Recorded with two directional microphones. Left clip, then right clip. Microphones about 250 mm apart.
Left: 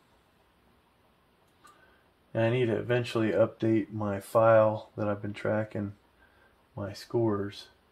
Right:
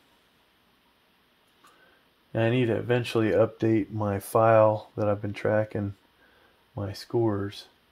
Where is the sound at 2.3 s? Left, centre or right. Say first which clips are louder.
Right 2 dB; right.